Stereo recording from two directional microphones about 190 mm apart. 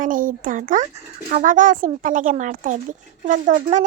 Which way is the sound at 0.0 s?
45° right (ahead or behind).